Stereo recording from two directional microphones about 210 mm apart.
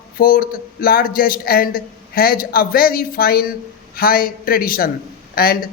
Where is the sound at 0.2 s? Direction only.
40° left (ahead or behind).